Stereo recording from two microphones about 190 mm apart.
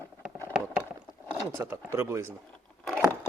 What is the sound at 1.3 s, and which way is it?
Speech, 15° right (ahead or behind).